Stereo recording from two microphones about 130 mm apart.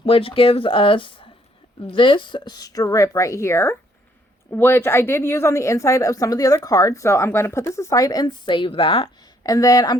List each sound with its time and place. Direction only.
0.0 s speech: 45° left (ahead or behind)
9.4 s speech: 25° left (ahead or behind)